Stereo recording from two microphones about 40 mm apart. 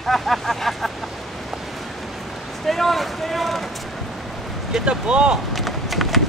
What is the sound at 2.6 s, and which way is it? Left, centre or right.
Speech, centre.